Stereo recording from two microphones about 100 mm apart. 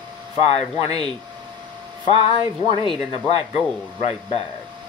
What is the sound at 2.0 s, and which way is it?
Speech, 50° right (ahead or behind).